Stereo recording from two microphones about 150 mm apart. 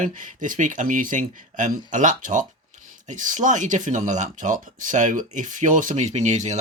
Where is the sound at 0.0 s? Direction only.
60° right (ahead or behind).